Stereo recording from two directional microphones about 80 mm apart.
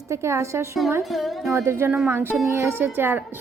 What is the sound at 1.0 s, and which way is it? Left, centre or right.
Speech, centre.